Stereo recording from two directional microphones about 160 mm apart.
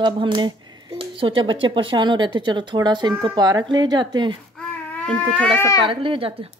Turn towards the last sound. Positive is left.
turn(degrees=-35)  # may be behind; listen again after turning